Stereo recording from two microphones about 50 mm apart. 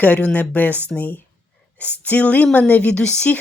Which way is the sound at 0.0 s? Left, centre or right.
Left.